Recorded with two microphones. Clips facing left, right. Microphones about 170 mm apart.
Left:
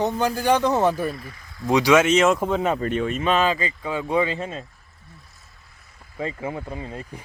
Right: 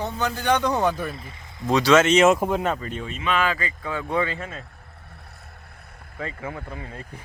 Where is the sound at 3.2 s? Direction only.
35° left (ahead or behind).